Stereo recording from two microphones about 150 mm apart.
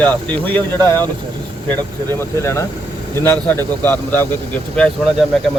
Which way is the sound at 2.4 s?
20° left (ahead or behind).